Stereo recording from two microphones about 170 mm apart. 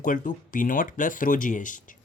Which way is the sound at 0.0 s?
50° left (ahead or behind).